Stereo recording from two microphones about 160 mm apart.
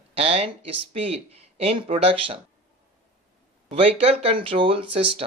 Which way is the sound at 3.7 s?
35° right (ahead or behind).